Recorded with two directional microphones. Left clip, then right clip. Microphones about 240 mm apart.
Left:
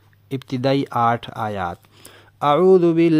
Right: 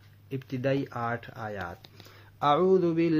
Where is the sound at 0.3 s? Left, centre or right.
Left.